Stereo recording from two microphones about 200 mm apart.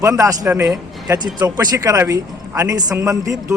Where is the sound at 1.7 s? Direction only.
15° right (ahead or behind).